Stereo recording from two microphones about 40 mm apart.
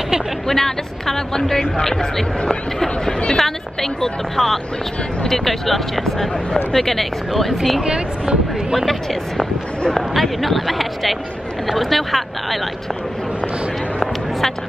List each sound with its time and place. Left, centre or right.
0.5 s speech: centre
7.8 s speech: right
9.9 s speech: centre